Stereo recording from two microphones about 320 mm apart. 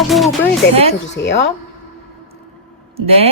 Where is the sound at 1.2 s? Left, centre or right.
Left.